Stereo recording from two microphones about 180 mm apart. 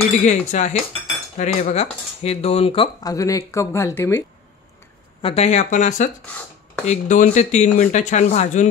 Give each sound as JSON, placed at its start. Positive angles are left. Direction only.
{"t": 0.2, "sound": "speech", "side_deg": 40}
{"t": 5.2, "sound": "speech", "side_deg": 35}